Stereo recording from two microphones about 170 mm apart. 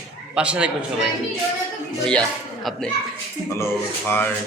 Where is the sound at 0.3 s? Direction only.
5° right (ahead or behind).